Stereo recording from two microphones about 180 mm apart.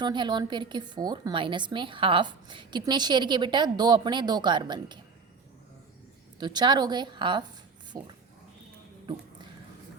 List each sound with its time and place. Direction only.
0.0 s a woman's voice: 25° right (ahead or behind)
6.4 s a woman's voice: 25° right (ahead or behind)